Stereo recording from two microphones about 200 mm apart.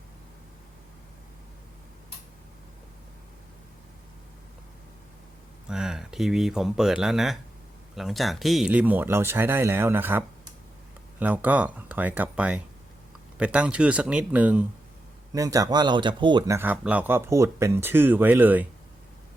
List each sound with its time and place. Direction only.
5.6 s speech: 5° right (ahead or behind); by 16.6 s 25° right (ahead or behind)
16.6 s speech: 10° right (ahead or behind)